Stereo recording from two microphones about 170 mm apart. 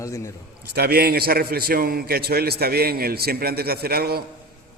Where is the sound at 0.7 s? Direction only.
70° right (ahead or behind).